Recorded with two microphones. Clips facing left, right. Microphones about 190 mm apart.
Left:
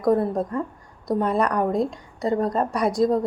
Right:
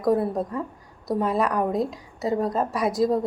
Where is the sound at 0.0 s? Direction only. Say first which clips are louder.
Left 2 dB; centre (ahead or behind).